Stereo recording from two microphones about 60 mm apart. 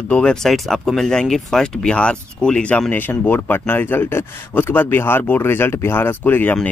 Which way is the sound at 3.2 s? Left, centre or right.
Left.